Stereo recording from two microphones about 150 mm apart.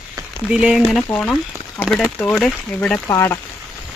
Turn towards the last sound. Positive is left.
turn(degrees=20)  # may be behind; listen again after turning